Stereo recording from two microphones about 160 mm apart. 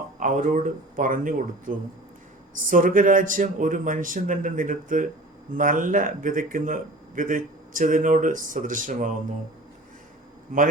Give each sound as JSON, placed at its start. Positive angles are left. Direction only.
{"t": 0.2, "sound": "speech", "side_deg": -50}
{"t": 10.5, "sound": "a man's voice", "side_deg": -55}